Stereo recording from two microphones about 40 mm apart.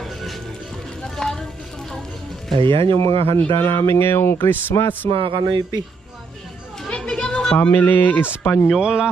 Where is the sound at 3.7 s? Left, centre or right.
Left.